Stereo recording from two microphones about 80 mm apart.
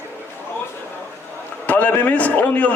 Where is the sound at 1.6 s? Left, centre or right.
Centre.